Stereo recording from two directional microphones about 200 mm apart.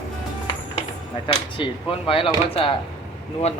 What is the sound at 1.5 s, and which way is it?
Speech, 25° left (ahead or behind).